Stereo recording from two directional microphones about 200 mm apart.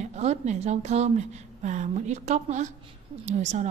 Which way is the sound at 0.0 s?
35° right (ahead or behind).